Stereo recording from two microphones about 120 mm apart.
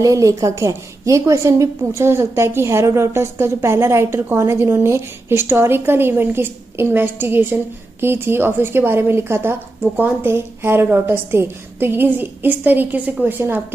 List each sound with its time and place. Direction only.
0.0 s a woman's voice: 30° right (ahead or behind)